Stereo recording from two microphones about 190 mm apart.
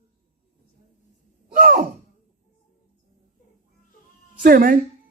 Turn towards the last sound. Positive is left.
turn(degrees=-50)  # may be behind; listen again after turning